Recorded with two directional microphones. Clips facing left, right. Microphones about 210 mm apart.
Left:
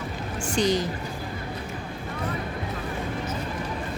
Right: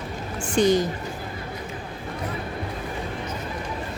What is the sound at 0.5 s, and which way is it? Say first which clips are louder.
Speech: right 4 dB; 50° right (ahead or behind).